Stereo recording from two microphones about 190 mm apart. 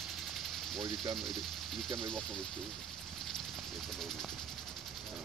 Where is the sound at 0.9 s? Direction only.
Centre (ahead or behind).